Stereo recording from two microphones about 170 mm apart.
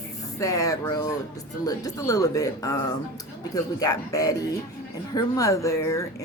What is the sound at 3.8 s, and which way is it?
Speech, 20° left (ahead or behind).